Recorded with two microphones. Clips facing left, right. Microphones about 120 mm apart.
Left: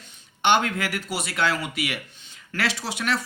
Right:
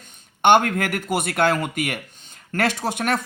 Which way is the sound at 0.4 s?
50° right (ahead or behind).